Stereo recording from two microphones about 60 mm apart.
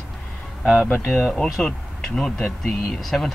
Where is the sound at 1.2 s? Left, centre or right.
Centre.